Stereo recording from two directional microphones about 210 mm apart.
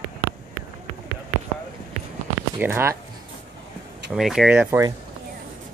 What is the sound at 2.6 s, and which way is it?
Speech, 10° right (ahead or behind).